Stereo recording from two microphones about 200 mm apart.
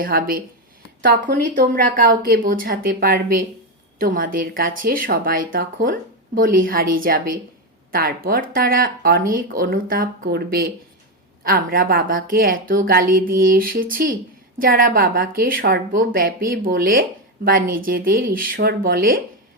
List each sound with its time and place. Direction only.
0.0 s a woman's voice: 45° right (ahead or behind)